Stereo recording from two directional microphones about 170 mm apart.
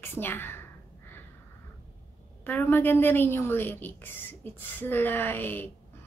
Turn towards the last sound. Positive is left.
turn(degrees=10)  # may be behind; listen again after turning